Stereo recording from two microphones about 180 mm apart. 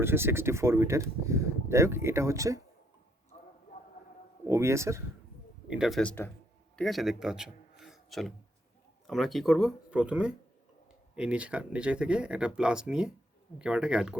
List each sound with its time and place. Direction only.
0.0 s speech: 15° right (ahead or behind)
3.3 s a sound: 40° left (ahead or behind)
4.4 s speech: 15° right (ahead or behind)
5.6 s a man's voice: 5° right (ahead or behind)